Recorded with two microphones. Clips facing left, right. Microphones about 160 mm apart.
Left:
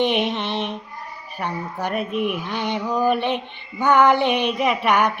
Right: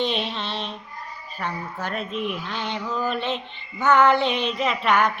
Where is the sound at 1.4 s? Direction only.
15° left (ahead or behind).